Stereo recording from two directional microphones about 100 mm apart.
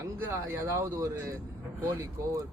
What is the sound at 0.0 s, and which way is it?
Speech, 30° right (ahead or behind).